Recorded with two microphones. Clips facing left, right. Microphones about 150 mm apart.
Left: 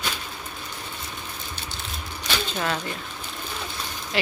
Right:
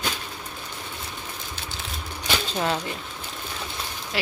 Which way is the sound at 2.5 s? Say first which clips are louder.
Right 3 dB; 25° right (ahead or behind).